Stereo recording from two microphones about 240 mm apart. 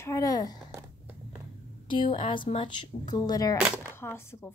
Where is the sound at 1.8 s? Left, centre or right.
Left.